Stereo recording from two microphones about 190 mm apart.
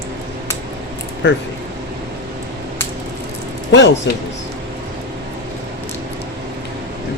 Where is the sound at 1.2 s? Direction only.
70° left (ahead or behind).